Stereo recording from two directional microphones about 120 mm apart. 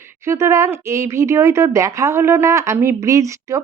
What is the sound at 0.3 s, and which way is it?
Speech, 25° right (ahead or behind).